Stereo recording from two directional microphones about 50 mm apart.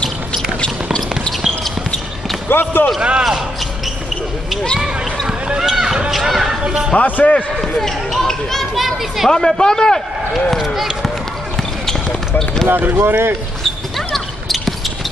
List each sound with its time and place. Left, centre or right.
0.0 s a sound: left
2.5 s speech: left
3.0 s speech: centre
4.7 s speech: centre
5.6 s a sound: centre
6.0 s speech: centre
6.6 s speech: centre
7.0 s a man's voice: left
7.7 s speech: centre
9.3 s a man's voice: centre
10.6 s speech: centre
11.8 s basketball bounce: centre
12.8 s speech: right
13.9 s basketball bounce: centre